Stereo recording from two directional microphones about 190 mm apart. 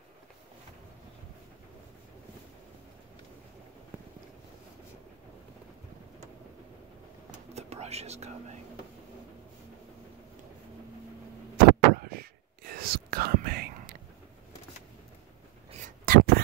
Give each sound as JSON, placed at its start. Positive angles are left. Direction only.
{"t": 7.5, "sound": "whispering", "side_deg": -35}
{"t": 11.5, "sound": "whispering", "side_deg": -50}
{"t": 16.1, "sound": "a sound", "side_deg": -50}